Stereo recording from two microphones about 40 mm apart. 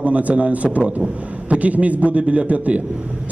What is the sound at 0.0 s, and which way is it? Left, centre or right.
A man's voice, right.